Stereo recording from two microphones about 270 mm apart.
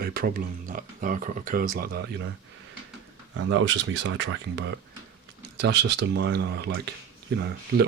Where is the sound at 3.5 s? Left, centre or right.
Right.